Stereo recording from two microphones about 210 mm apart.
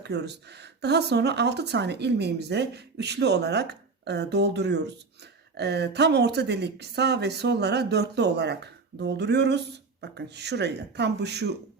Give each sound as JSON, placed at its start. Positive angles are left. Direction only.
{"t": 0.0, "sound": "speech", "side_deg": -55}